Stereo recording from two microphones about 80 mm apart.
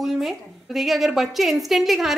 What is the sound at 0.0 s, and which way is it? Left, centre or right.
A woman's voice, centre.